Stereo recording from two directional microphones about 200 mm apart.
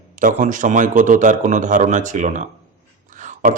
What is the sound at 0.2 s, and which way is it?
A man's voice, 40° right (ahead or behind).